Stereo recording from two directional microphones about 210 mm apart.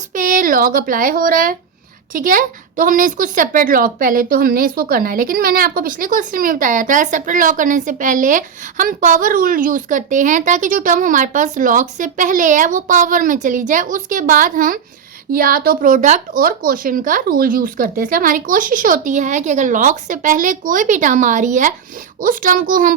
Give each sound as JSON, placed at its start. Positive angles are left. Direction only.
{"t": 0.1, "sound": "a woman's voice", "side_deg": -40}